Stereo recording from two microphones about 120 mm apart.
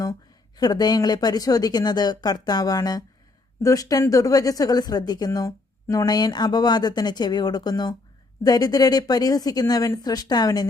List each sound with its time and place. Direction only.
0.0 s a woman's voice: 30° left (ahead or behind)